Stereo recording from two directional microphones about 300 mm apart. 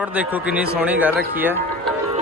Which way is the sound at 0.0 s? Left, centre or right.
Centre.